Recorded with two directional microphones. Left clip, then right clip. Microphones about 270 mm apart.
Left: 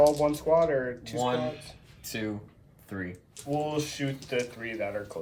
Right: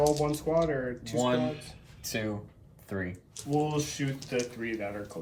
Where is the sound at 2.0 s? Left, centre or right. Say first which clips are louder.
Right 1 dB; centre.